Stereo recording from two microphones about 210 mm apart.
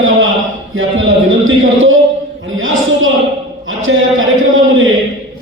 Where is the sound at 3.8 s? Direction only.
70° right (ahead or behind).